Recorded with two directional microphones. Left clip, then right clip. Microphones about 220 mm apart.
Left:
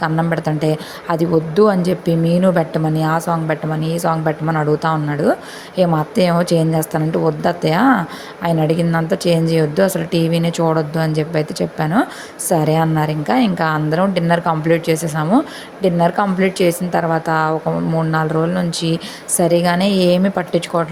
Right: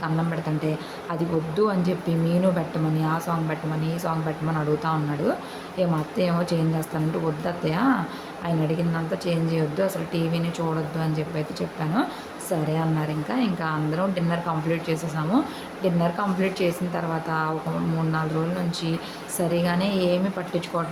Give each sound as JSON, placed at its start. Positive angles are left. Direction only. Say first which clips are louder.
{"t": 0.0, "sound": "speech", "louder": "left 10 dB", "side_deg": 35}